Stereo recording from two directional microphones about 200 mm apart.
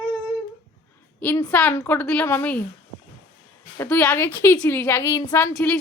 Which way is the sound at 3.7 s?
10° left (ahead or behind).